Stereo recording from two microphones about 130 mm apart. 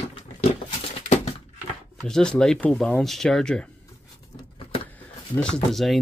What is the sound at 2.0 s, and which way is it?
Speech, 5° left (ahead or behind).